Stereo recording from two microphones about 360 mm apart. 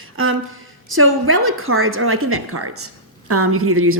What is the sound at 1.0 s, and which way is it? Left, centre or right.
A woman's voice, right.